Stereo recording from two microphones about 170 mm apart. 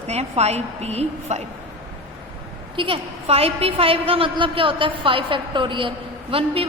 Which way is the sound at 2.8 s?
30° right (ahead or behind).